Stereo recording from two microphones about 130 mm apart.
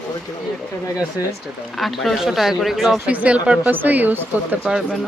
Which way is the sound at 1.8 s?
Centre (ahead or behind).